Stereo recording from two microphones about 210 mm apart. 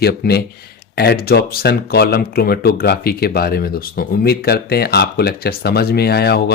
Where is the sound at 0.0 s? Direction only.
50° left (ahead or behind).